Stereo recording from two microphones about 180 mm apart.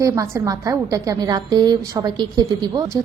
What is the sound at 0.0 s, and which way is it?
A woman's voice, 20° right (ahead or behind).